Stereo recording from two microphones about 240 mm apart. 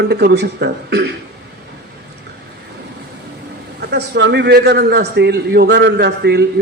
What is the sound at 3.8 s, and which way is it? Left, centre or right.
A man's voice, right.